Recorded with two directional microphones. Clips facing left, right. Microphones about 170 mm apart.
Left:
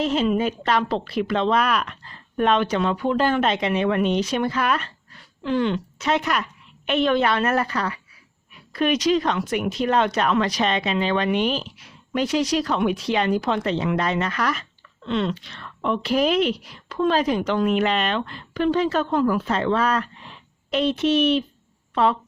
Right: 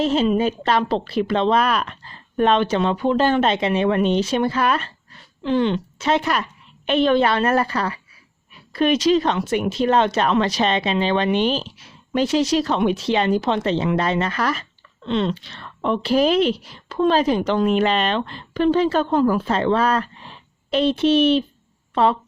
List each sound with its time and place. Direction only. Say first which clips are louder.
0.0 s speech: right 3 dB; 30° right (ahead or behind)